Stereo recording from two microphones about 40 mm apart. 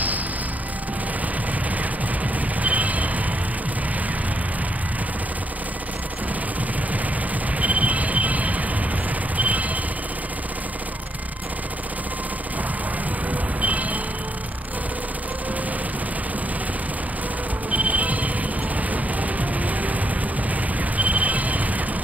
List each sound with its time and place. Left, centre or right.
2.6 s vehicle: right
7.5 s music: right
13.3 s vehicle: right
17.6 s music: right
19.3 s music: right
21.0 s a sound: right